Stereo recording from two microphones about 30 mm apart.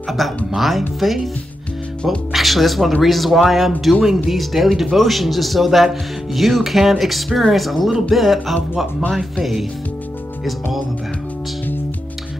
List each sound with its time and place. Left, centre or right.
0.5 s speech: centre